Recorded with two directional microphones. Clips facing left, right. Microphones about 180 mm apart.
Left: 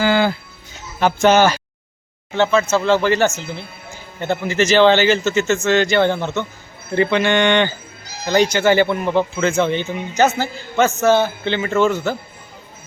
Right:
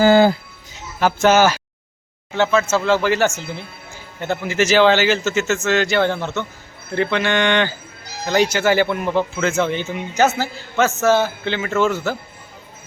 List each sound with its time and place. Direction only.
0.0 s speech: 40° right (ahead or behind)
0.9 s speech: 5° right (ahead or behind)